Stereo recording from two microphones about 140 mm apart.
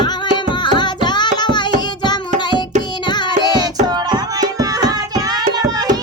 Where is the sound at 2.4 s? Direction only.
30° left (ahead or behind).